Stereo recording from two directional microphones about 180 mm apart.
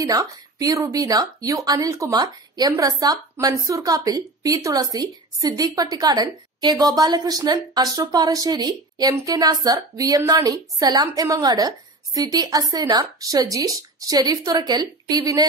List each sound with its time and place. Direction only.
0.0 s a woman's voice: 20° right (ahead or behind)